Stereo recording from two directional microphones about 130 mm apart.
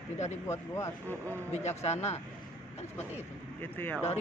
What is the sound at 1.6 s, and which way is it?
Speech, 60° left (ahead or behind).